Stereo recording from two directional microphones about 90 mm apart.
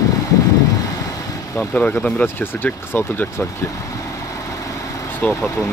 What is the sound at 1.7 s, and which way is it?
Speech, 15° left (ahead or behind).